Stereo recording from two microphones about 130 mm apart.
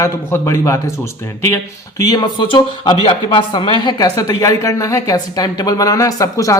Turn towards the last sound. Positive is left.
turn(degrees=25)  # may be behind; listen again after turning